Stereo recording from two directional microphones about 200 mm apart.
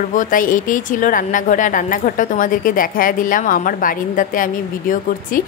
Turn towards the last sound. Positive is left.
turn(degrees=40)  # may be behind; listen again after turning